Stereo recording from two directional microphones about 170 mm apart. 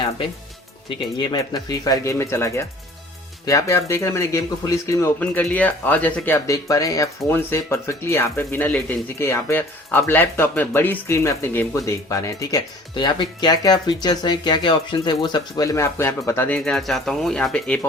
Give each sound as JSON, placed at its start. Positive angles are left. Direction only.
{"t": 1.2, "sound": "speech", "side_deg": 25}